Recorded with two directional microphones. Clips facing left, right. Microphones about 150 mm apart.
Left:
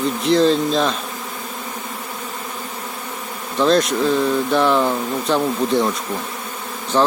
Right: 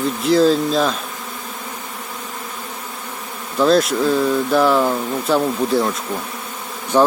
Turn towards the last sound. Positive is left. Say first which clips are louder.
# right 2 dB
turn(degrees=-10)  # may be behind; listen again after turning